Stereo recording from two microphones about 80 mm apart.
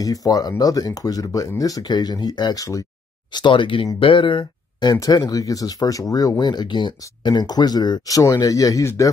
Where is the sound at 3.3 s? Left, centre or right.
Left.